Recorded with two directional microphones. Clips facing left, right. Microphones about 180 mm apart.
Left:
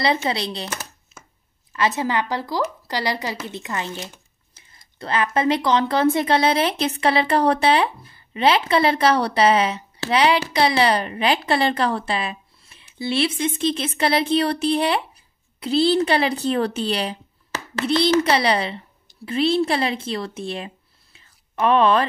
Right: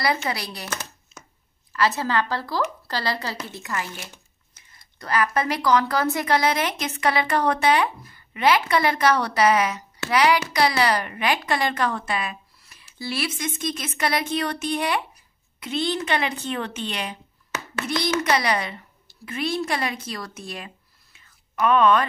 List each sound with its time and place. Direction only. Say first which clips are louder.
0.0 s speech: left 4 dB; 25° left (ahead or behind)